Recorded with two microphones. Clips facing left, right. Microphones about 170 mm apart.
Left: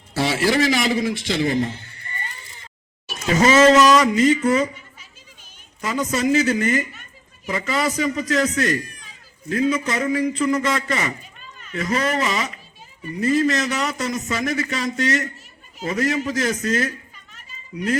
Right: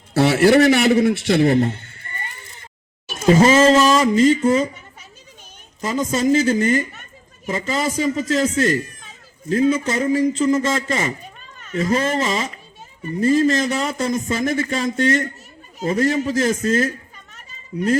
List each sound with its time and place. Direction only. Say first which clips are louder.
0.1 s a man's voice: right 7 dB; 60° right (ahead or behind)
3.3 s speech: even; 30° right (ahead or behind)
5.8 s speech: right 2 dB; 30° right (ahead or behind)